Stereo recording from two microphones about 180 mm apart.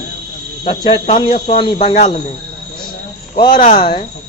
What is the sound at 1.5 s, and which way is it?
Speech, 30° left (ahead or behind).